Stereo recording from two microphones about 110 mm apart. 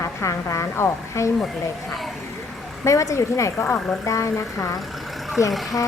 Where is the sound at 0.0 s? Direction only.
25° left (ahead or behind).